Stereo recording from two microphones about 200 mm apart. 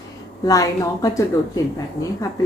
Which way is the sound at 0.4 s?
15° left (ahead or behind).